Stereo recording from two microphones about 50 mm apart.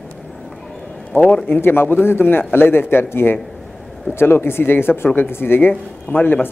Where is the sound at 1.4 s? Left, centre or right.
Left.